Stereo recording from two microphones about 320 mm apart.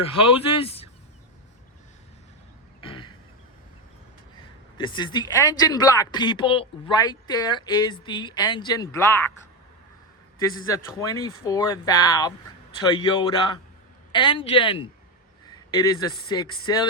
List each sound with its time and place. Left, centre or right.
0.6 s a sound: centre
2.8 s throat clearing: centre
4.8 s speech: centre
10.7 s speech: centre
15.9 s speech: centre